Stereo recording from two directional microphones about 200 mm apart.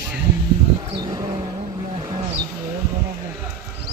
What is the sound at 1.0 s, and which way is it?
Vehicle, 20° right (ahead or behind).